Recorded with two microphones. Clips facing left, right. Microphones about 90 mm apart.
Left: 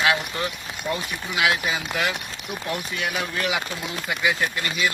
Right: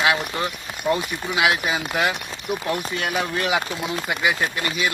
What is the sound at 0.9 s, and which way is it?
Speech, 25° right (ahead or behind).